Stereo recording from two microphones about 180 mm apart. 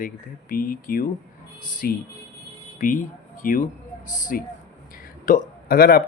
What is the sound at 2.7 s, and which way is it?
Speech, 45° left (ahead or behind).